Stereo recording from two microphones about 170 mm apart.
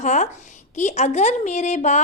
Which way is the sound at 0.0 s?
45° left (ahead or behind).